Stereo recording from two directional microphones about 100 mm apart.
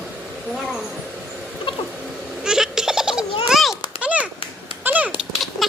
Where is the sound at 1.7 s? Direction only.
60° left (ahead or behind).